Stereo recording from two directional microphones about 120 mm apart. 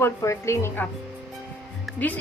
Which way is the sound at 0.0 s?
25° left (ahead or behind).